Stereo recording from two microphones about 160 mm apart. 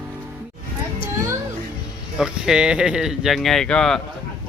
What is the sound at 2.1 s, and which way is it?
Speech, 5° right (ahead or behind).